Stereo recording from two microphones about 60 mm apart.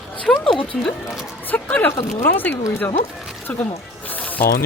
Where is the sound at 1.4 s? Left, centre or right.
Left.